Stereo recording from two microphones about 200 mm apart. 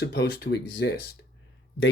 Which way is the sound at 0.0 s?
55° left (ahead or behind).